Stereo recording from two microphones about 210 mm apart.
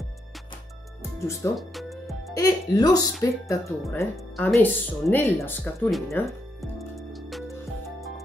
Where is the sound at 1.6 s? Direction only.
Centre (ahead or behind).